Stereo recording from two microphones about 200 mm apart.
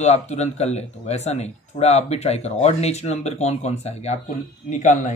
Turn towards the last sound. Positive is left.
turn(degrees=40)  # may be behind; listen again after turning